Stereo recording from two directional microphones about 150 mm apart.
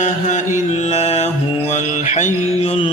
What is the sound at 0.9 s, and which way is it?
Music, 45° left (ahead or behind).